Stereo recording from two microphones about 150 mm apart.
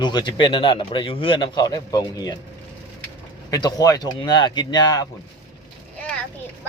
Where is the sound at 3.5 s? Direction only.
25° left (ahead or behind).